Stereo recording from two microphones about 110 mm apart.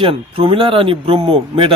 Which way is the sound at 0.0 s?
55° right (ahead or behind).